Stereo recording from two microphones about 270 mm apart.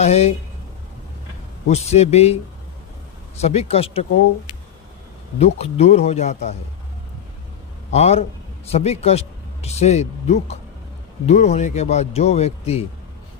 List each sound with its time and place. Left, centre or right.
0.0 s speech: left
1.6 s speech: left
5.4 s speech: left
7.9 s speech: left